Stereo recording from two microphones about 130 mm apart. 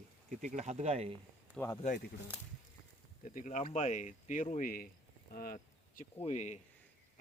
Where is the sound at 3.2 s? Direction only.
75° left (ahead or behind).